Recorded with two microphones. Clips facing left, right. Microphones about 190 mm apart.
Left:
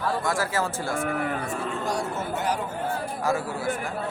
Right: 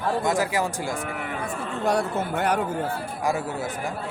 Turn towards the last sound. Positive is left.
turn(degrees=-20)  # may be behind; listen again after turning